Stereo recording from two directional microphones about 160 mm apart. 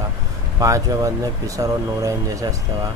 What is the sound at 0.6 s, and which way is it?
Speech, 20° right (ahead or behind).